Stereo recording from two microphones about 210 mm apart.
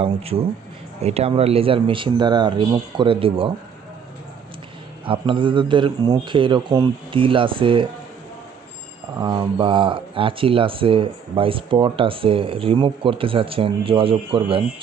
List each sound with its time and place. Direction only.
0.0 s speech: 30° right (ahead or behind)
5.0 s speech: 25° right (ahead or behind)
9.1 s speech: 20° right (ahead or behind)